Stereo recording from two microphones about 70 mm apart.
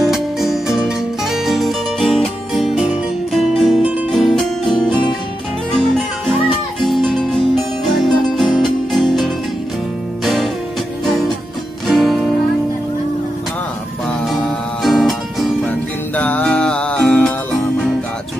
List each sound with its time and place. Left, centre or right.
0.0 s music: centre
11.9 s music: centre
14.3 s music: centre
16.2 s music: left